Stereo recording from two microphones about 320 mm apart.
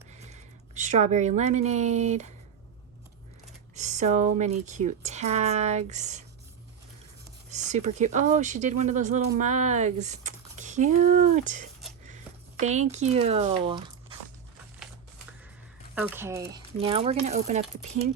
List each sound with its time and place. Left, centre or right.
0.1 s speech: right
3.8 s speech: right
7.5 s a sound: right
7.9 s speech: right
16.0 s speech: centre